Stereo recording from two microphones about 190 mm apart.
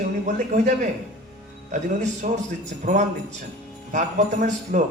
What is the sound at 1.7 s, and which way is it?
A man's voice, 40° right (ahead or behind).